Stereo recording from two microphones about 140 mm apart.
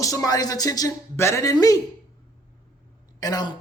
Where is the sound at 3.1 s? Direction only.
25° left (ahead or behind).